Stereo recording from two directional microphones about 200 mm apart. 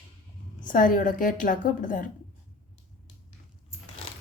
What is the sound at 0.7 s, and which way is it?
A woman's voice, 45° left (ahead or behind).